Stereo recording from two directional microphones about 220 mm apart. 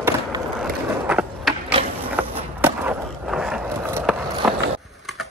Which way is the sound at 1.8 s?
25° right (ahead or behind).